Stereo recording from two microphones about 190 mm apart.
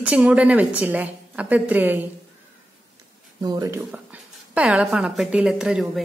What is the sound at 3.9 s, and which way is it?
A woman's voice, 5° right (ahead or behind).